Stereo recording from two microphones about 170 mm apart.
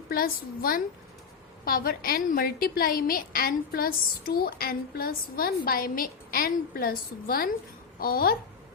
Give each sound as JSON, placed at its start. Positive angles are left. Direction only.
{"t": 0.1, "sound": "a woman's voice", "side_deg": 60}